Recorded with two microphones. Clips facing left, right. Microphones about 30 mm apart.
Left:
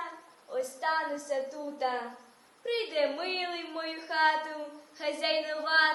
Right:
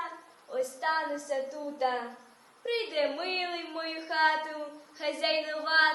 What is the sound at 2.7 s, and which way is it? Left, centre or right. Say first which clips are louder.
A woman's voice: even; centre.